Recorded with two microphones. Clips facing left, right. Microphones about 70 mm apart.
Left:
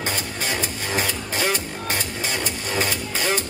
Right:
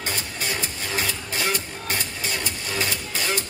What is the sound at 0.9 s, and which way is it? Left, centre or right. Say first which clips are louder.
Music: left 3 dB; left.